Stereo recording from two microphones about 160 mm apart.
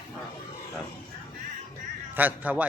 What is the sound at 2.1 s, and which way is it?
Speech, 10° right (ahead or behind).